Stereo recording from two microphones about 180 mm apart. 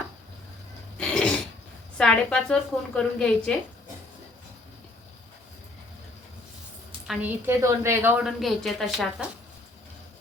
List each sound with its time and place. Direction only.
0.9 s a sound: 5° left (ahead or behind)
2.0 s a woman's voice: 5° left (ahead or behind)
7.1 s a woman's voice: 10° right (ahead or behind)
8.3 s a woman's voice: centre (ahead or behind)